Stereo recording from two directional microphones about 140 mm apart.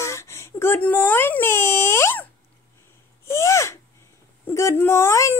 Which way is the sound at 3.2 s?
20° left (ahead or behind).